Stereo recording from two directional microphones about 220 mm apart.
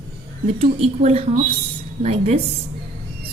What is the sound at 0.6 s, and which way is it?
Speech, 30° right (ahead or behind).